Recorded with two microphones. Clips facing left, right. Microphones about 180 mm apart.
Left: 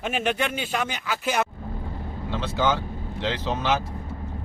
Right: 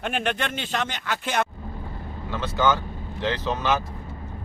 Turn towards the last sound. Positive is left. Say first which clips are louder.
# right 1 dB
turn(degrees=15)  # may be behind; listen again after turning